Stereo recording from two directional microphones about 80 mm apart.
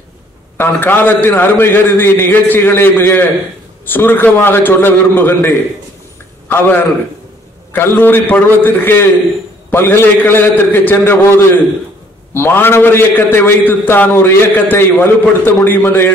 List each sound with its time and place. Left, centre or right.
0.6 s a man's voice: left
6.5 s a man's voice: left